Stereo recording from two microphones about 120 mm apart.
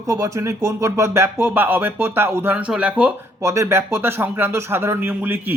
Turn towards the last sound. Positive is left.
turn(degrees=-15)  # may be behind; listen again after turning